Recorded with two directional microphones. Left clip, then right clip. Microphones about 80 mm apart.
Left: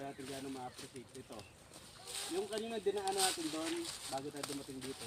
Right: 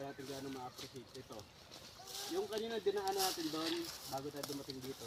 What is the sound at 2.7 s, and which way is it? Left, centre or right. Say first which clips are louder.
Speech: even; right.